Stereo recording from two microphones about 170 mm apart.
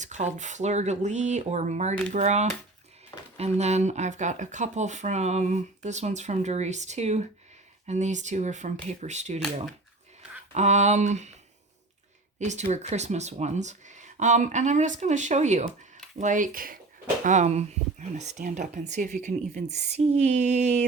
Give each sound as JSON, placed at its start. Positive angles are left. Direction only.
{"t": 0.0, "sound": "speech", "side_deg": -45}
{"t": 10.5, "sound": "speech", "side_deg": -40}
{"t": 12.4, "sound": "speech", "side_deg": -45}
{"t": 17.2, "sound": "speech", "side_deg": -45}